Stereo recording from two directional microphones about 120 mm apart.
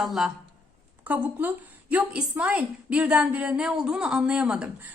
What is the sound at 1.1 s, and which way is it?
A woman's voice, 15° right (ahead or behind).